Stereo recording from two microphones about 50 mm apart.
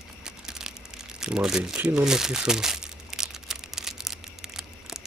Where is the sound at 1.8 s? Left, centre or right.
Right.